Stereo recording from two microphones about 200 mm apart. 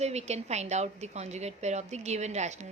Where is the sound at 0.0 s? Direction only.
35° right (ahead or behind).